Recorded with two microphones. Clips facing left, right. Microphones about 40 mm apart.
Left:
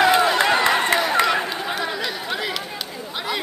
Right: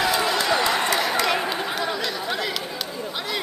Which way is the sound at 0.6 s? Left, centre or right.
Left.